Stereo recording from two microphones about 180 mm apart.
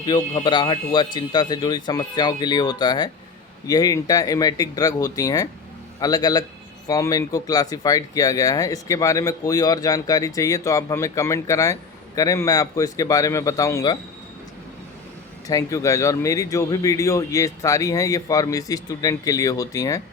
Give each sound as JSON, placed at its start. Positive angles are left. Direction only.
{"t": 0.0, "sound": "speech", "side_deg": 25}
{"t": 15.4, "sound": "speech", "side_deg": 20}